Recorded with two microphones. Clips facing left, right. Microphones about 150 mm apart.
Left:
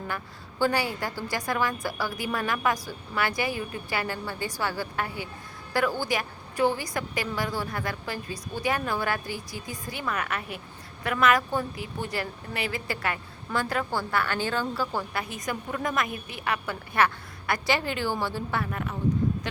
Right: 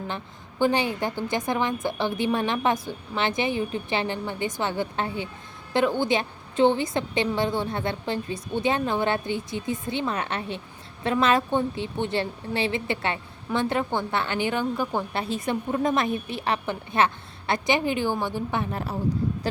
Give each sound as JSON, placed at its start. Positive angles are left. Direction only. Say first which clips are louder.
{"t": 0.6, "sound": "a woman's voice", "louder": "right 3 dB", "side_deg": -20}
{"t": 18.7, "sound": "speech", "louder": "right 2 dB", "side_deg": -30}